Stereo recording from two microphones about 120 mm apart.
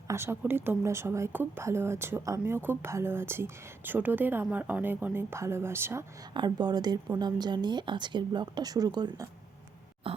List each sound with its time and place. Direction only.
0.1 s speech: 20° right (ahead or behind)
6.3 s speech: 35° right (ahead or behind)
10.0 s a sound: 55° right (ahead or behind)